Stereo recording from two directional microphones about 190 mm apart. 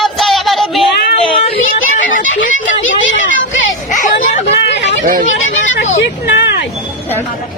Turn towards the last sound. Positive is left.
turn(degrees=60)  # may be behind; listen again after turning